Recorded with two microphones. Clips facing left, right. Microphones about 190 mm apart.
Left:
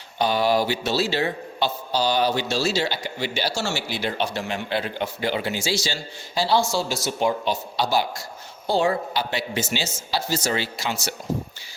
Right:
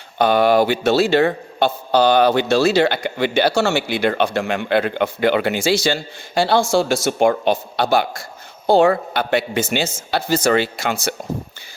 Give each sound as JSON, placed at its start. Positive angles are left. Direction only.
{"t": 0.2, "sound": "a man's voice", "side_deg": -55}